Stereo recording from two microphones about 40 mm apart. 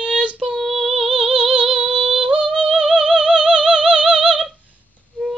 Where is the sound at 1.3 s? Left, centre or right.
Right.